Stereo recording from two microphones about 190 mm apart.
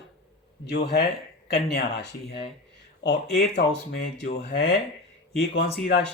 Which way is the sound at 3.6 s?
55° left (ahead or behind).